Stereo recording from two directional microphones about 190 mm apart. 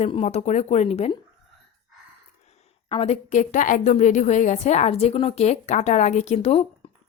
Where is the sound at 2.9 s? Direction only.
30° left (ahead or behind).